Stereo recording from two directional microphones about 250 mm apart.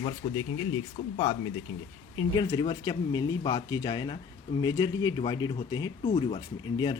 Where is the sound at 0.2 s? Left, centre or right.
Centre.